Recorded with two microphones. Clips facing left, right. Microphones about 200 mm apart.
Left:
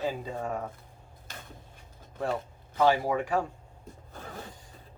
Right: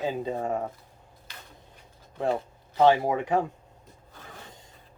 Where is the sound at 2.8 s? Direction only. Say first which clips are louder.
Right 4 dB; 25° right (ahead or behind).